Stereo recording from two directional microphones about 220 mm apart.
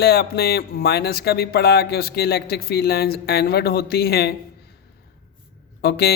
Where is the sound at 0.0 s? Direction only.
45° left (ahead or behind).